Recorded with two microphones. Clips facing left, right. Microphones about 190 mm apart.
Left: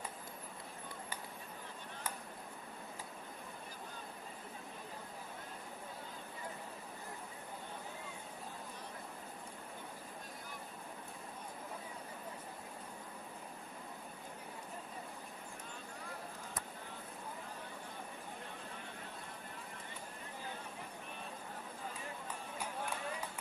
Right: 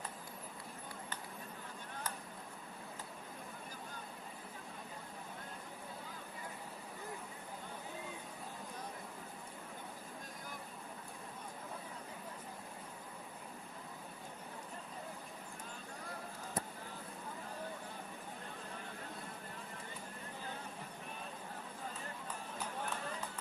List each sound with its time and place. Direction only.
22.5 s run: 10° left (ahead or behind)